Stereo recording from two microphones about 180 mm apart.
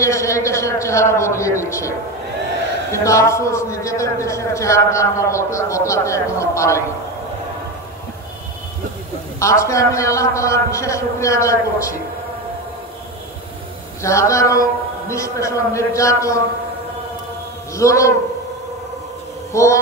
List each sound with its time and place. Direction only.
0.0 s a man's voice: 15° left (ahead or behind)
9.4 s a man's voice: 15° left (ahead or behind)
14.0 s a man's voice: 15° left (ahead or behind)
17.7 s a man's voice: 15° left (ahead or behind)
19.5 s a man's voice: 15° left (ahead or behind)